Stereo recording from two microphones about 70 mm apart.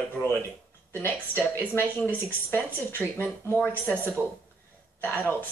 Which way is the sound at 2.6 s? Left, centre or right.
Left.